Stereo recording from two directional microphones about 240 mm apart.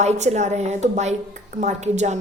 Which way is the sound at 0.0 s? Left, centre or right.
Right.